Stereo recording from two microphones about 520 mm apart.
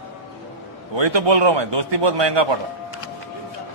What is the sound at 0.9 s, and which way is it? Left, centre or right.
A man's voice, right.